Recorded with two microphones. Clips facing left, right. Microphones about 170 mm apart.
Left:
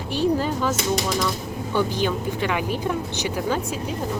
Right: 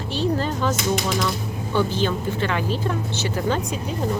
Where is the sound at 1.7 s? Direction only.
15° left (ahead or behind).